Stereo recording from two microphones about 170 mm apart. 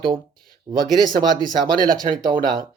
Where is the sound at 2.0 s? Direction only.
25° right (ahead or behind).